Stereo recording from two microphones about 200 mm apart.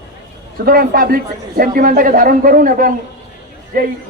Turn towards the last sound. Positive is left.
turn(degrees=-45)  # may be behind; listen again after turning